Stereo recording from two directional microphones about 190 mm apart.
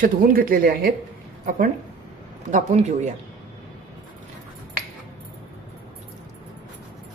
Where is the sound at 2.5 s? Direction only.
40° right (ahead or behind).